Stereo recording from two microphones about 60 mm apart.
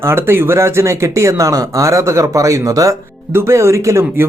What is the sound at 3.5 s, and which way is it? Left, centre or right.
Speech, right.